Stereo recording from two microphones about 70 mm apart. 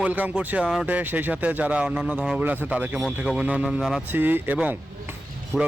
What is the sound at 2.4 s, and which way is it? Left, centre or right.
Speech, right.